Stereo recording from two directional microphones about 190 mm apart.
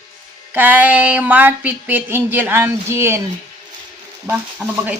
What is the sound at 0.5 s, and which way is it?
A woman's voice, 10° right (ahead or behind).